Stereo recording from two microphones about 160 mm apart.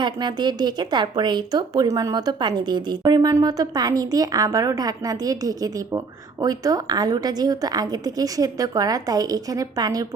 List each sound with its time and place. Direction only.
0.0 s a woman's voice: 25° right (ahead or behind)